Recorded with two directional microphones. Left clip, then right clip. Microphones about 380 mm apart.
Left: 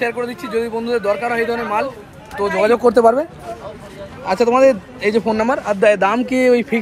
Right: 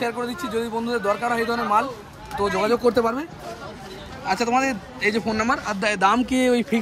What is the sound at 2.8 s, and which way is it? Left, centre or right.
Speech, left.